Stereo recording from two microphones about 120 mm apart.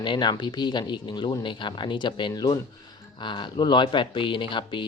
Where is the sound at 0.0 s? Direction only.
40° left (ahead or behind).